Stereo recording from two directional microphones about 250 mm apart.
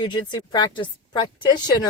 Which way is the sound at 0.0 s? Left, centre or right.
Centre.